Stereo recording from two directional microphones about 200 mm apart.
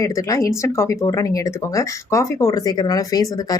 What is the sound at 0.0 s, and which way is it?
Speech, 15° left (ahead or behind).